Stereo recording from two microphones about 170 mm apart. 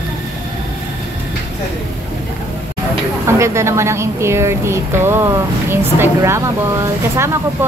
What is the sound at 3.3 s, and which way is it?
Speech, 15° right (ahead or behind).